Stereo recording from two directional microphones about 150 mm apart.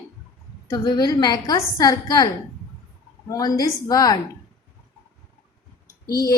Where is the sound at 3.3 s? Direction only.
25° left (ahead or behind).